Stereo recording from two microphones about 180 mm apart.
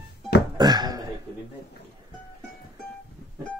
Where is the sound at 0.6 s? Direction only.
20° right (ahead or behind).